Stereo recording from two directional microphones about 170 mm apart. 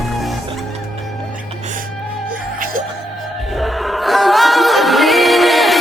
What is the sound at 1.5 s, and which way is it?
Music, 45° right (ahead or behind).